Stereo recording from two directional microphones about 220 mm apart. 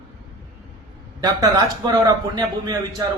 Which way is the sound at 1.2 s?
15° right (ahead or behind).